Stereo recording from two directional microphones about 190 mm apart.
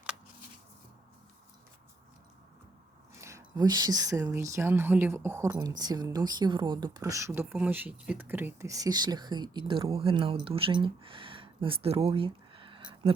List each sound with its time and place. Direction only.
3.2 s a woman's voice: 15° right (ahead or behind)